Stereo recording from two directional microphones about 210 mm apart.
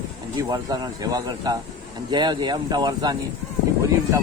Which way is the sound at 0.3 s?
15° right (ahead or behind).